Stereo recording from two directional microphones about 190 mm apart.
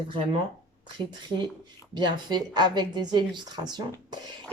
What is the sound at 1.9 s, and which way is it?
A woman's voice, 25° right (ahead or behind).